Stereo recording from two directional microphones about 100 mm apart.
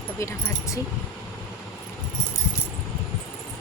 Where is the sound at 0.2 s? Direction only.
30° left (ahead or behind).